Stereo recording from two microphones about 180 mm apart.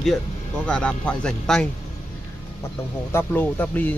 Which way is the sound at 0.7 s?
5° left (ahead or behind).